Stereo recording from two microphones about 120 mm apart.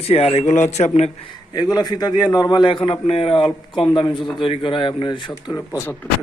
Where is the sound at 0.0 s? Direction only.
55° left (ahead or behind).